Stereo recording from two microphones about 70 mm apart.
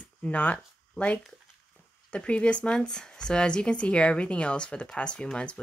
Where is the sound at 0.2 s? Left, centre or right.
Left.